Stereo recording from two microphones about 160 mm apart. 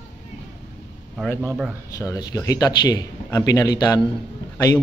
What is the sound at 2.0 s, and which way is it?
A man's voice, 20° left (ahead or behind).